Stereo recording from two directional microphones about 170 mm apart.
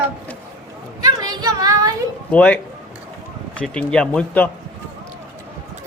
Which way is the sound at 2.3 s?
10° left (ahead or behind).